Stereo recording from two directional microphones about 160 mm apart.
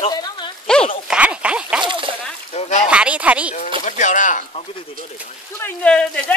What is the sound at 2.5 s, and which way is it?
Speech, 45° left (ahead or behind).